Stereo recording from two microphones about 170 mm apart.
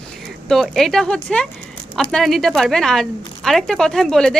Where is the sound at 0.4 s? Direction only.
Centre (ahead or behind).